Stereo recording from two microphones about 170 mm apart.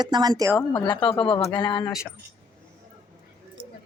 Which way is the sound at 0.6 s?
25° left (ahead or behind).